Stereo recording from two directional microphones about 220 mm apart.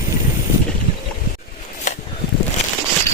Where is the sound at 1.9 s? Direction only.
35° left (ahead or behind).